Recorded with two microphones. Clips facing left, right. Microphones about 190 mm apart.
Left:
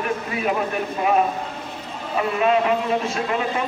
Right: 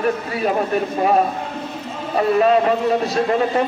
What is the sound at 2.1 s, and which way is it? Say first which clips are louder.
Speech: right 5 dB; 40° right (ahead or behind).